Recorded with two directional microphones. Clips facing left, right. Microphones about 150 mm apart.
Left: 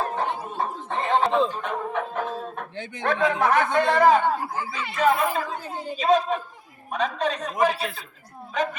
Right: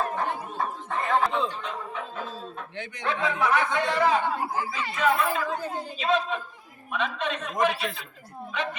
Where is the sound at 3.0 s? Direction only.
50° left (ahead or behind).